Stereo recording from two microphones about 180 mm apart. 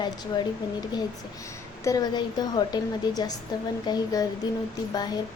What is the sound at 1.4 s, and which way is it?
A woman's voice, 20° left (ahead or behind).